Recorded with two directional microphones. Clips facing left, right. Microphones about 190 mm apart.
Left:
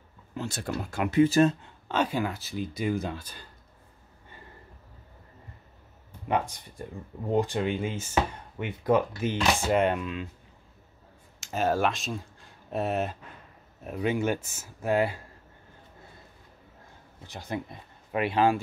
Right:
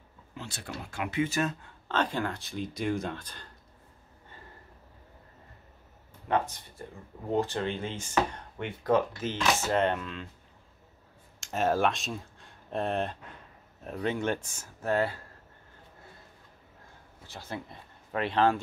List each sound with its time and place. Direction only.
0.4 s speech: 45° left (ahead or behind)
1.9 s speech: 10° left (ahead or behind)
6.2 s speech: 15° left (ahead or behind)
11.3 s speech: centre (ahead or behind)
17.3 s speech: 15° left (ahead or behind)